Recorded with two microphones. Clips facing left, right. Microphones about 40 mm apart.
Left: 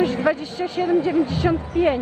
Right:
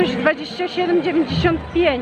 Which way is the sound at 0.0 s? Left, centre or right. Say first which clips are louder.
Right 2 dB; right.